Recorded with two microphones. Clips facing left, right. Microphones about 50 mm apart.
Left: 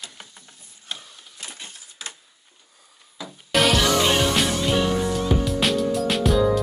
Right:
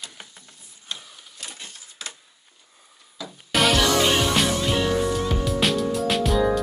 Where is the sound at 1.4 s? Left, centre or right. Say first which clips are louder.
Even; left.